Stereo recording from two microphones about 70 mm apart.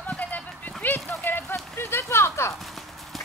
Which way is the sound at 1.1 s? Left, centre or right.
Left.